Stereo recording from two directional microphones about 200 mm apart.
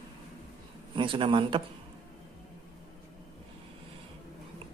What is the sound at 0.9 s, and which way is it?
Speech, 25° right (ahead or behind).